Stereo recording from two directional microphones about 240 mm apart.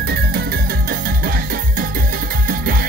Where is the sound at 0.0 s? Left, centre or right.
Right.